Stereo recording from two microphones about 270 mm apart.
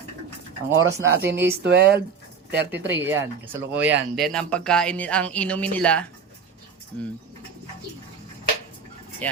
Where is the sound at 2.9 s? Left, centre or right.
Centre.